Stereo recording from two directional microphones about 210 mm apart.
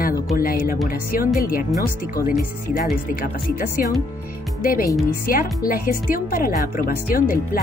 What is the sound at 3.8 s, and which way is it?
Speech, 40° left (ahead or behind).